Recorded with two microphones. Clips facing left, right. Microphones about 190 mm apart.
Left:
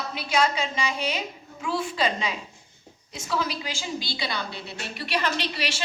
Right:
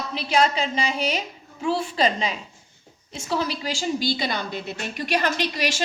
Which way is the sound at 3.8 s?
50° right (ahead or behind).